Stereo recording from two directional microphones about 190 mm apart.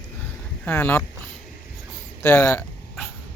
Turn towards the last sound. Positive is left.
turn(degrees=10)  # may be behind; listen again after turning